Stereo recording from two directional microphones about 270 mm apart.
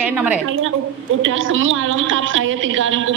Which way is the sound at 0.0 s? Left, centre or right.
Centre.